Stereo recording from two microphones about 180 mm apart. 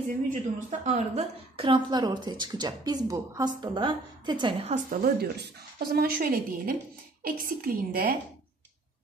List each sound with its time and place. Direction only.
0.3 s a woman's voice: 45° right (ahead or behind); by 4.6 s 25° right (ahead or behind)
4.6 s a woman's voice: 55° right (ahead or behind)